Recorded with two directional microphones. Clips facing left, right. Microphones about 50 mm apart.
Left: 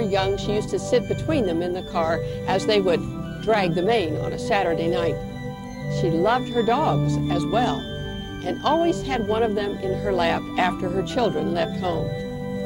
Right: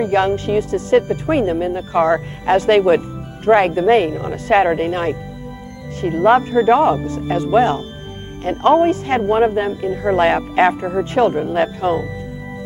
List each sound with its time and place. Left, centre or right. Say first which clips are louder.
0.0 s speech: right 6 dB; right